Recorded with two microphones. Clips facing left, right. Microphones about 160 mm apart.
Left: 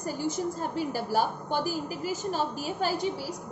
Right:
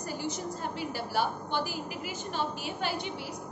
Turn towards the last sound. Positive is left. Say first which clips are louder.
# left 5 dB
turn(degrees=40)  # may be behind; listen again after turning